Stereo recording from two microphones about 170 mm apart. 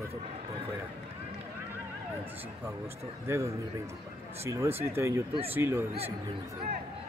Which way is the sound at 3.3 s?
15° right (ahead or behind).